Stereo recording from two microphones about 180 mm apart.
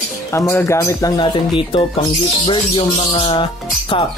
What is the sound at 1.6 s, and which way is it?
Speech, 30° left (ahead or behind).